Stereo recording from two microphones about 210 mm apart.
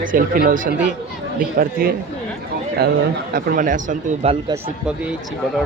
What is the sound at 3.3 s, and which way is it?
Speech, 40° right (ahead or behind).